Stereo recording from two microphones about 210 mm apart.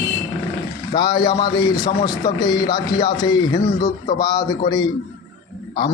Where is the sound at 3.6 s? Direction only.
40° left (ahead or behind).